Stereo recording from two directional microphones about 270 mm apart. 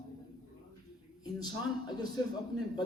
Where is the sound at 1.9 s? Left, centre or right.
Centre.